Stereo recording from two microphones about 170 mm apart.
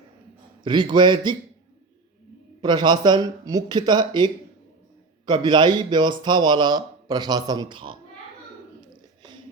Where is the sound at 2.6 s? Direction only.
25° right (ahead or behind).